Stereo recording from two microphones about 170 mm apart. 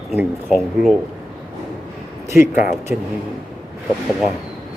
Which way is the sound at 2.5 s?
50° left (ahead or behind).